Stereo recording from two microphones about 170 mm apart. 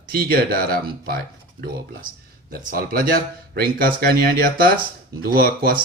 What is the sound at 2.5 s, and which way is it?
Speech, 60° right (ahead or behind).